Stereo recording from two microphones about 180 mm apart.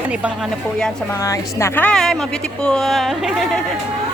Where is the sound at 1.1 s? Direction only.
15° left (ahead or behind).